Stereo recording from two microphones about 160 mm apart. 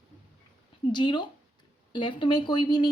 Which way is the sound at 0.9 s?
30° left (ahead or behind).